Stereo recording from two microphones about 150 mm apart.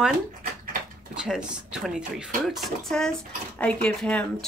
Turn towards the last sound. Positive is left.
turn(degrees=5)  # may be behind; listen again after turning